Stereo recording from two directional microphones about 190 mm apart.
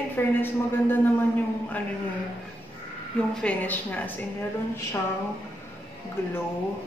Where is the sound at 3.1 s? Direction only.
10° left (ahead or behind).